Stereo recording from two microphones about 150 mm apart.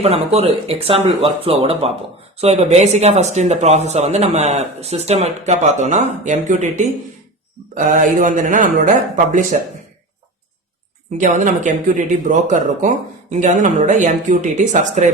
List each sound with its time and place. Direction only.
0.0 s speech: 45° right (ahead or behind)
11.2 s speech: 55° right (ahead or behind)